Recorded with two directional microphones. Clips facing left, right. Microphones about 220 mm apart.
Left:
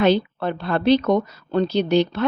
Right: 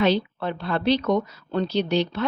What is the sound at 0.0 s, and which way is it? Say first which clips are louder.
Speech: left 3 dB; 50° left (ahead or behind).